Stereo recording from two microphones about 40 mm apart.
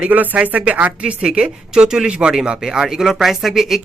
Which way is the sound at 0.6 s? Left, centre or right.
Right.